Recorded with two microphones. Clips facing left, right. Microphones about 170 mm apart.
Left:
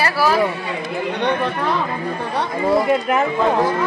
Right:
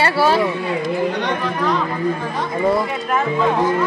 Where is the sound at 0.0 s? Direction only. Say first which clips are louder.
Right 2 dB; 30° right (ahead or behind).